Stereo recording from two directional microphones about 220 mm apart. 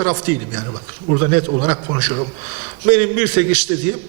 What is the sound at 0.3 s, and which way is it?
Speech, 15° right (ahead or behind).